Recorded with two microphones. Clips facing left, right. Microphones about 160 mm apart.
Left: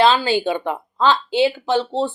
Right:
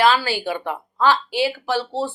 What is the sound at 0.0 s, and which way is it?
Speech, 20° left (ahead or behind).